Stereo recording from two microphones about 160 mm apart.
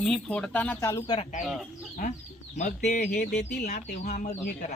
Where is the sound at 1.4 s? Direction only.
Centre (ahead or behind).